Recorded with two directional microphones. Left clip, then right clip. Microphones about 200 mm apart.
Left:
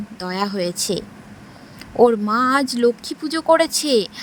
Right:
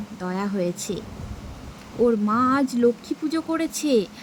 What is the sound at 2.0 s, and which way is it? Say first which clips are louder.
Speech: left 5 dB; 40° left (ahead or behind).